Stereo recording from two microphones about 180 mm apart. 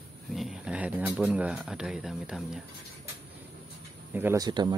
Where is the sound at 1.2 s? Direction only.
5° right (ahead or behind).